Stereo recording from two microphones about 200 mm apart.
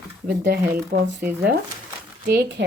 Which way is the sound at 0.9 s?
55° right (ahead or behind).